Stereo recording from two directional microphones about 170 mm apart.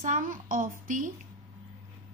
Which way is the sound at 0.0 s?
50° right (ahead or behind).